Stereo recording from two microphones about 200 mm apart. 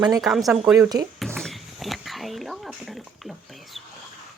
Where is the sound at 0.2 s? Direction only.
Centre (ahead or behind).